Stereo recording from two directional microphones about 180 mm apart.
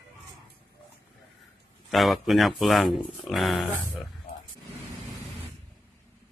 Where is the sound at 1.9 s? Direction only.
Centre (ahead or behind).